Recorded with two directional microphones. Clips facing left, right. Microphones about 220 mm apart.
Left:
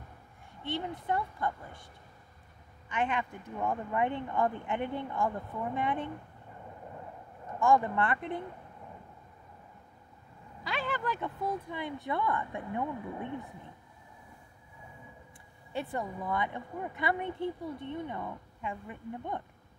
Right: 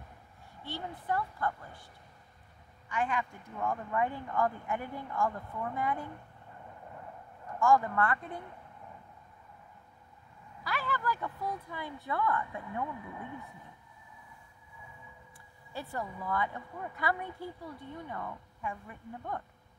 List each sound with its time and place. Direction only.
1.0 s speech: 20° left (ahead or behind)
2.9 s speech: 25° left (ahead or behind)
7.4 s speech: 25° left (ahead or behind)
10.6 s speech: 25° left (ahead or behind)
15.7 s speech: 20° left (ahead or behind)